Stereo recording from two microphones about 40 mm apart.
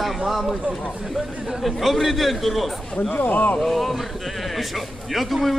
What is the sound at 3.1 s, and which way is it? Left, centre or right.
Speech, left.